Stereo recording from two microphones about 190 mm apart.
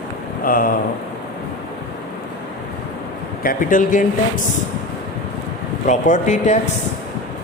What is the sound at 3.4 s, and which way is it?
Speech, 45° left (ahead or behind).